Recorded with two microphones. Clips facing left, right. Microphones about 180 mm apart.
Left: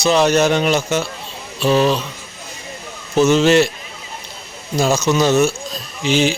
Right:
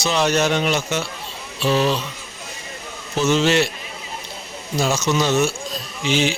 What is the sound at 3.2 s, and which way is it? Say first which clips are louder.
Speech: left 5 dB; 45° left (ahead or behind).